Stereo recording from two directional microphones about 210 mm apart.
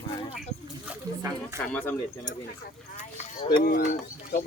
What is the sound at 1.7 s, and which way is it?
Speech, 5° left (ahead or behind).